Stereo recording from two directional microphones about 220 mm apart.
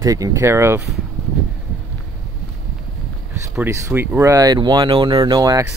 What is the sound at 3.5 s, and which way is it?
Speech, 10° right (ahead or behind).